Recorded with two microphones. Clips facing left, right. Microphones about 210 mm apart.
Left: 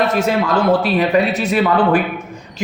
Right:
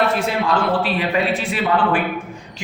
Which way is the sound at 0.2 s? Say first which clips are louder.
Left 4 dB; 40° left (ahead or behind).